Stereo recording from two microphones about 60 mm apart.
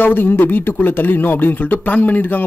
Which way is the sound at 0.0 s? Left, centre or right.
Left.